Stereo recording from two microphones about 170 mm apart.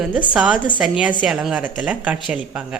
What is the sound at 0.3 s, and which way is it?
A woman's voice, 5° right (ahead or behind).